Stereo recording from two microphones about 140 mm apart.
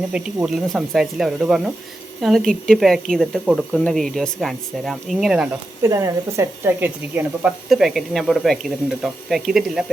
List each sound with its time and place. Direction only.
0.1 s speech: 5° right (ahead or behind)
5.8 s speech: 20° right (ahead or behind)
7.7 s speech: centre (ahead or behind)